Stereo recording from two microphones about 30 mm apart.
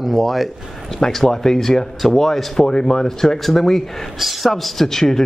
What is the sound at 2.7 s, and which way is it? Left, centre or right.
Speech, left.